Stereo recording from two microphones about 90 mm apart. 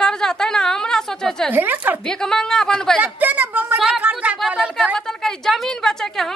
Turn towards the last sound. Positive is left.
turn(degrees=5)  # may be behind; listen again after turning